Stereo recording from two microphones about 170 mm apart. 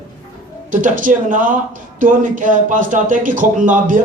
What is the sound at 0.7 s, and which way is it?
Speech, 50° right (ahead or behind).